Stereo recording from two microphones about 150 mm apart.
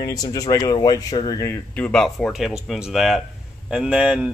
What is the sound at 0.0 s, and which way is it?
Speech, 25° left (ahead or behind).